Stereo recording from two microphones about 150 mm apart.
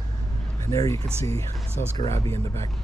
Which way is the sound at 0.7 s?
20° left (ahead or behind).